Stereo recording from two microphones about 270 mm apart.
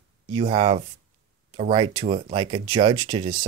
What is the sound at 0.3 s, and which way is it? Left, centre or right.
Speech, right.